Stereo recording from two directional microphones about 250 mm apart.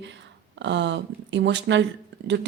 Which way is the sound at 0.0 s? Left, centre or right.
Right.